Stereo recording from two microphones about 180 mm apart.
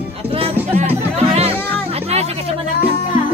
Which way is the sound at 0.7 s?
35° right (ahead or behind).